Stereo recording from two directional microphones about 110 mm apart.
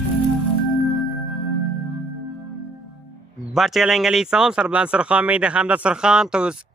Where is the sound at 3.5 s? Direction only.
Centre (ahead or behind).